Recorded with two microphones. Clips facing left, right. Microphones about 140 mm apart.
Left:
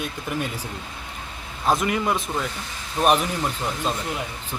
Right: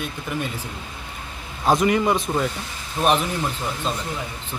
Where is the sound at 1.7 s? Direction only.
Centre (ahead or behind).